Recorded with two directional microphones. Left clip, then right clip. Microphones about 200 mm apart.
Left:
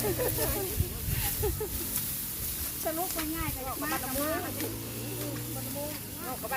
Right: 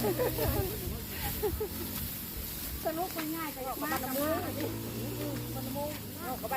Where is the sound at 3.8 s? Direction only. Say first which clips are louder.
Even; 35° left (ahead or behind).